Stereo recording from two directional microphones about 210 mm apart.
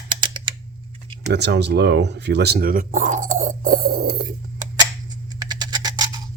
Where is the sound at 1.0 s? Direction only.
25° right (ahead or behind).